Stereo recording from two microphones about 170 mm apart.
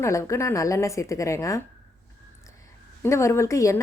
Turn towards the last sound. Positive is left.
turn(degrees=15)  # may be behind; listen again after turning